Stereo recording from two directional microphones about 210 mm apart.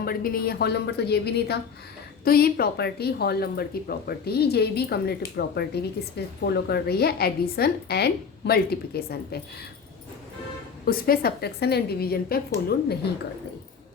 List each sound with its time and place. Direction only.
0.0 s speech: 45° left (ahead or behind)
10.8 s speech: 45° left (ahead or behind)